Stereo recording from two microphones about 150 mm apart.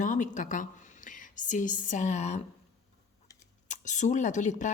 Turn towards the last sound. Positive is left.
turn(degrees=55)  # may be behind; listen again after turning